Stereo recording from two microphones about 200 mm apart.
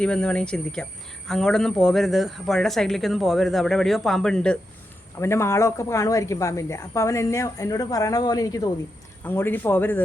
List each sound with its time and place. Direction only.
0.0 s a woman's voice: 5° left (ahead or behind)